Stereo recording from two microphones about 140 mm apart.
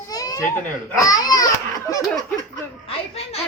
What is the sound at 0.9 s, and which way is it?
Crying, 25° left (ahead or behind).